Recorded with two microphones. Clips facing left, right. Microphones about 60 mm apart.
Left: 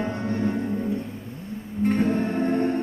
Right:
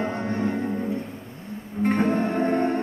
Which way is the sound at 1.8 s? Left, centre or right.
Right.